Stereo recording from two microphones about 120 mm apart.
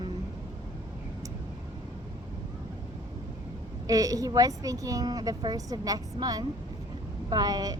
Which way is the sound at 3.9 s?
30° right (ahead or behind).